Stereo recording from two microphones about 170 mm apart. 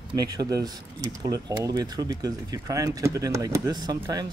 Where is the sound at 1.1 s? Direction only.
20° right (ahead or behind).